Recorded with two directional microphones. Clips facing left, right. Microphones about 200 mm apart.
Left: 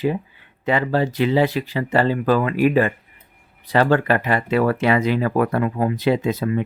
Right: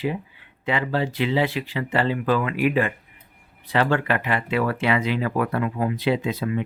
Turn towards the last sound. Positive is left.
turn(degrees=45)  # may be behind; listen again after turning